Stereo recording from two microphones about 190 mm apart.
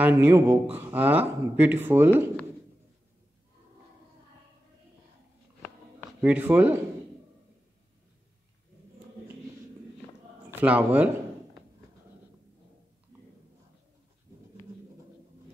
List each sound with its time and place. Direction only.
0.0 s speech: 10° right (ahead or behind)
6.2 s speech: 10° right (ahead or behind)
10.5 s speech: 10° right (ahead or behind)